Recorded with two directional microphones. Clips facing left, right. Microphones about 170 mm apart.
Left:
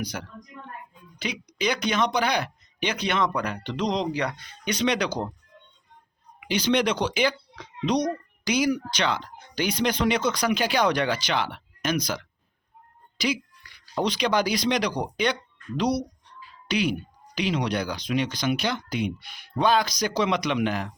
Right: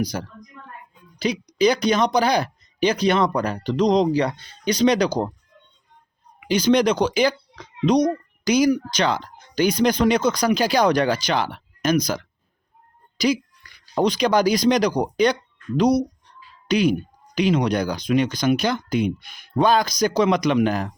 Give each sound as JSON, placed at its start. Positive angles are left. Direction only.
{"t": 0.0, "sound": "a child's voice", "side_deg": -35}
{"t": 6.5, "sound": "a child's voice", "side_deg": -40}